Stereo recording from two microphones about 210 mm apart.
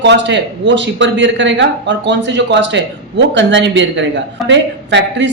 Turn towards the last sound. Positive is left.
turn(degrees=-60)  # may be behind; listen again after turning